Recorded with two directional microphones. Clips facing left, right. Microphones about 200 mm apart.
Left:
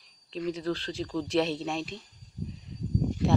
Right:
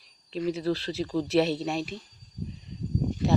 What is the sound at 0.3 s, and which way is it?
Speech, 10° right (ahead or behind).